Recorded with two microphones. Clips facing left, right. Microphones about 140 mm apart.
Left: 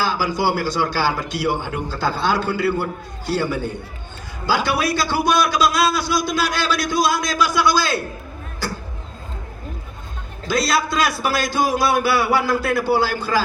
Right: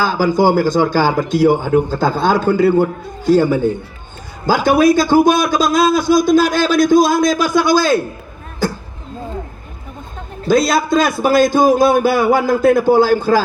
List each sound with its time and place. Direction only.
0.0 s a man's voice: 50° right (ahead or behind)
10.4 s a man's voice: 50° right (ahead or behind)